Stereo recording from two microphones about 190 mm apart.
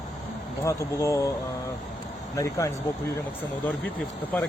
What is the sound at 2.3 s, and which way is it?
Speech, 15° left (ahead or behind).